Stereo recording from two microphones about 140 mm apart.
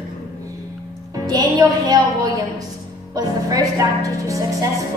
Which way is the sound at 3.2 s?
25° right (ahead or behind).